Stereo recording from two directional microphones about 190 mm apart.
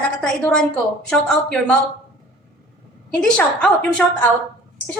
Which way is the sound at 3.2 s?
5° left (ahead or behind).